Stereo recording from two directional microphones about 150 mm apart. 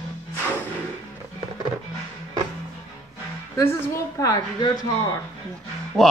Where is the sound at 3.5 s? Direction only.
20° left (ahead or behind).